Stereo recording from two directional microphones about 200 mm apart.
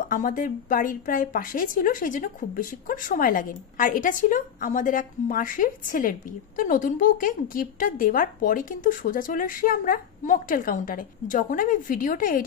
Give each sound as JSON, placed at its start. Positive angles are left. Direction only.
{"t": 0.1, "sound": "a woman's voice", "side_deg": 40}